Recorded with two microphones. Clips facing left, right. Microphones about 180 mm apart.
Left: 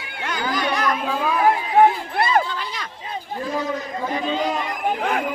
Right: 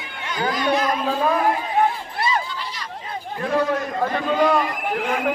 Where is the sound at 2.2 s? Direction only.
60° left (ahead or behind).